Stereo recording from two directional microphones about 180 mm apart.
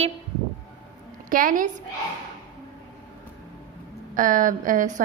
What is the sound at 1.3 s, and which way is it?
Speech, 50° right (ahead or behind).